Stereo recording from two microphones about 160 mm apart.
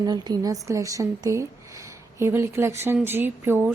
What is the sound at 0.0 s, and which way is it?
A woman's voice, 25° right (ahead or behind).